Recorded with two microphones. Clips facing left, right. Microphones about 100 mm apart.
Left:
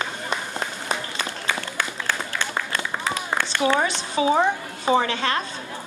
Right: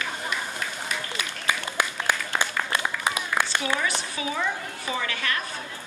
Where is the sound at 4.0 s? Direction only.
25° left (ahead or behind).